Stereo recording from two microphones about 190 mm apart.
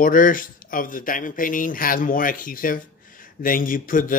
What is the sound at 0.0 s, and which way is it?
Speech, 45° left (ahead or behind).